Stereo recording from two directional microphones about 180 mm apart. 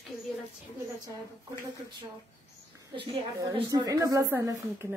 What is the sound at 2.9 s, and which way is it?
A woman's voice, 25° right (ahead or behind).